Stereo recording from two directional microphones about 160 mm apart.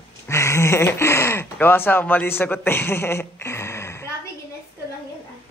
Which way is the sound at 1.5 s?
10° left (ahead or behind).